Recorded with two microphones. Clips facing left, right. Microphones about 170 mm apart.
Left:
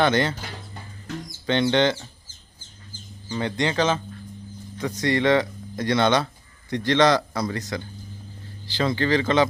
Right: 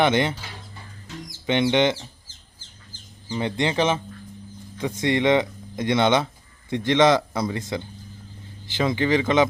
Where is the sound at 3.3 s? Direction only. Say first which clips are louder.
Right 1 dB; 25° right (ahead or behind).